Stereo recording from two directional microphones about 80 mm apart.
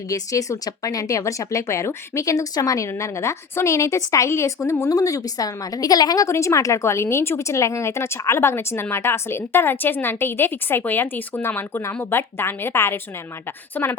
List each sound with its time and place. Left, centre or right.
0.1 s speech: left
6.2 s speech: left
13.7 s speech: left